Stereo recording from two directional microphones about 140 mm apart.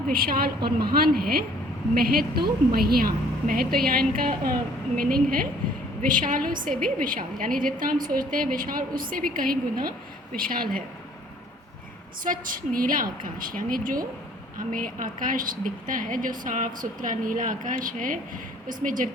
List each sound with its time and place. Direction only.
0.1 s a woman's voice: 90° right
6.0 s a woman's voice: 75° right (ahead or behind); by 10.8 s 90° right
12.2 s a woman's voice: 80° right
14.7 s speech: 75° right (ahead or behind)